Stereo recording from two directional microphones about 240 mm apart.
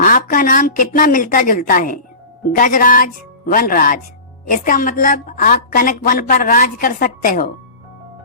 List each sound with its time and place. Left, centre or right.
0.0 s a woman's voice: left